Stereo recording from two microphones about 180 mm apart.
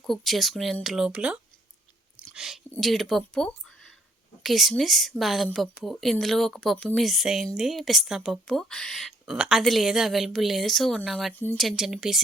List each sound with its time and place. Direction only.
0.0 s speech: centre (ahead or behind)